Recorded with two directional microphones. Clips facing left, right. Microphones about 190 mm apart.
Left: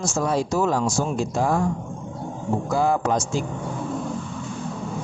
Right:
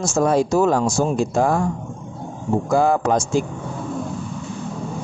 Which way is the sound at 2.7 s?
50° right (ahead or behind).